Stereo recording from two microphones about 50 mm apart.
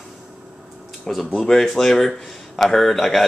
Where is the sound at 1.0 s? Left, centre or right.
Centre.